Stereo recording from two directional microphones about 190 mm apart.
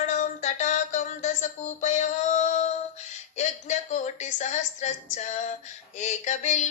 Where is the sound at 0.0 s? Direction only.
40° left (ahead or behind).